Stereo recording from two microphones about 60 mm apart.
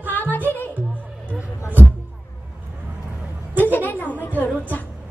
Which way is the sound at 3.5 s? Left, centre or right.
Left.